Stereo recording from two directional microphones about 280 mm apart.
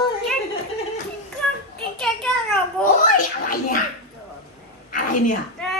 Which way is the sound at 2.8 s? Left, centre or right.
Left.